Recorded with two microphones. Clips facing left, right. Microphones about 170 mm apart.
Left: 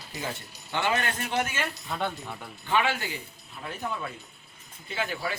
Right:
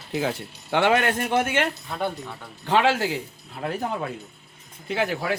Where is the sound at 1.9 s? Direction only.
5° right (ahead or behind).